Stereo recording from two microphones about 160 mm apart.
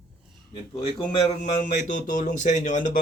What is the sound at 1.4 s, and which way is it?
Speech, 50° left (ahead or behind).